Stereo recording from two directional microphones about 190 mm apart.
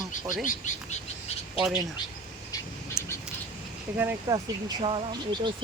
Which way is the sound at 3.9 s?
10° right (ahead or behind).